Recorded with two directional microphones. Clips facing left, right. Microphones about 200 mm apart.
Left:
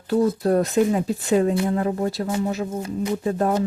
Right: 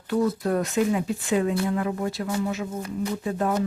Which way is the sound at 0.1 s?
35° left (ahead or behind).